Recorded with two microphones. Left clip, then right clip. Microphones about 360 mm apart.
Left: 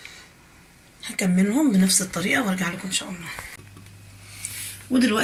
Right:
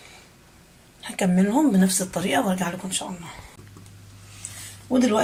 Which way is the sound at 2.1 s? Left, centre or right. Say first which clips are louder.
Even; right.